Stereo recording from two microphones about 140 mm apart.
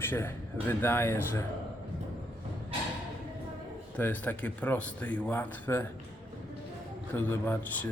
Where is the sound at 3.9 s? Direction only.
10° left (ahead or behind).